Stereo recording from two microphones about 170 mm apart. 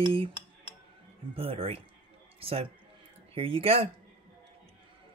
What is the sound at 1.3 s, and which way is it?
Speech, 35° right (ahead or behind).